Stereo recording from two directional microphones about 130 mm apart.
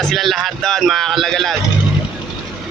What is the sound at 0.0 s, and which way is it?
Speech, centre (ahead or behind).